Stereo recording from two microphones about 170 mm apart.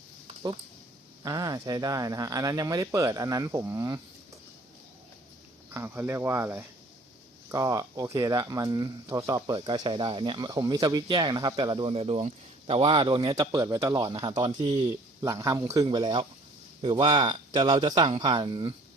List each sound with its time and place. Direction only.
1.2 s speech: 20° right (ahead or behind)
5.7 s speech: 10° right (ahead or behind); by 14.8 s 30° right (ahead or behind)
15.2 s speech: 15° right (ahead or behind)